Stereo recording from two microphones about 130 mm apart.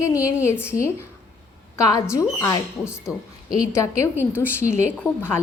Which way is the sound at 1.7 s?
20° left (ahead or behind).